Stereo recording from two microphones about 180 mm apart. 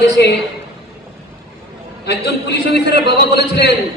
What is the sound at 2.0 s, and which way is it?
A man's voice, 70° left (ahead or behind).